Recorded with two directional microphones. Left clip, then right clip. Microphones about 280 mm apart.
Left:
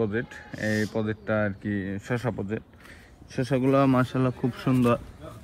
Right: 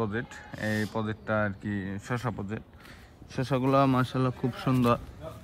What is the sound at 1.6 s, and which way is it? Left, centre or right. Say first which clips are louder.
Speech: left 4 dB; right.